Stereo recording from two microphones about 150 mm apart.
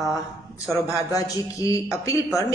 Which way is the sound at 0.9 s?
20° left (ahead or behind).